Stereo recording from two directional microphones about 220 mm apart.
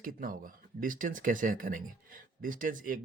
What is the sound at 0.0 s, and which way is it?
Speech, 40° right (ahead or behind).